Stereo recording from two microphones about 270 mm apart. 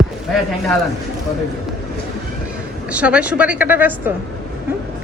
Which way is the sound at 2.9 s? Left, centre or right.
Centre.